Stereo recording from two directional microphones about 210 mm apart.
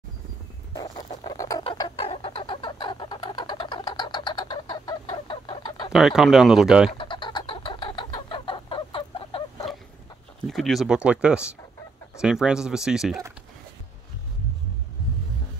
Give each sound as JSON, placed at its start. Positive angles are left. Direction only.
{"t": 0.7, "sound": "rodents", "side_deg": 20}
{"t": 1.6, "sound": "a sound", "side_deg": 25}
{"t": 5.0, "sound": "chicken", "side_deg": 25}
{"t": 5.9, "sound": "speech", "side_deg": 0}
{"t": 7.0, "sound": "chicken", "side_deg": 20}
{"t": 10.4, "sound": "speech", "side_deg": 0}